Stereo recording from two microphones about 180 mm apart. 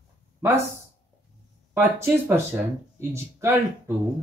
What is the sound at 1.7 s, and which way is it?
Speech, 10° right (ahead or behind).